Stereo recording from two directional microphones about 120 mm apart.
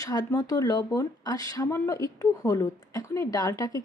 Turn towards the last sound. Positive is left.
turn(degrees=30)  # may be behind; listen again after turning